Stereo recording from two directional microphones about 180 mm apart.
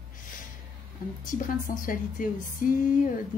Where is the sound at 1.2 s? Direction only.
50° left (ahead or behind).